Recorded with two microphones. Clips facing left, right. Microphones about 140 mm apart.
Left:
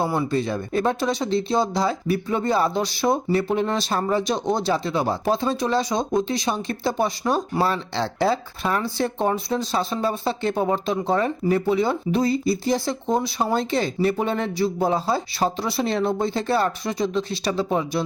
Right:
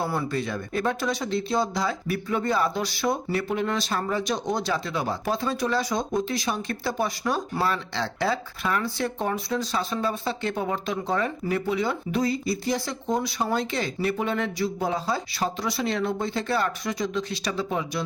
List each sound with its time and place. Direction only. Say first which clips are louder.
0.0 s speech: left 5 dB; 20° left (ahead or behind)